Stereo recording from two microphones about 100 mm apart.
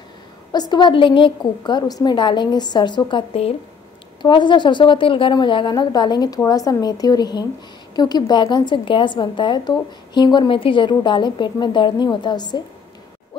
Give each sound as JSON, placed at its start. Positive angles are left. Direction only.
{"t": 0.5, "sound": "a woman's voice", "side_deg": 45}